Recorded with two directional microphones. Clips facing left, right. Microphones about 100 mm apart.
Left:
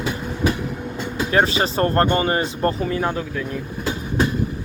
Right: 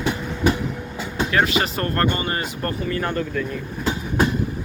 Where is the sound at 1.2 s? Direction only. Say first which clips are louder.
Left 2 dB; 30° left (ahead or behind).